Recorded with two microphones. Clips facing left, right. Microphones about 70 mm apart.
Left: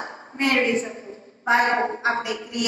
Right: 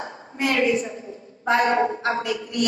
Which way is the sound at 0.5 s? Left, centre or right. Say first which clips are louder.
Even; left.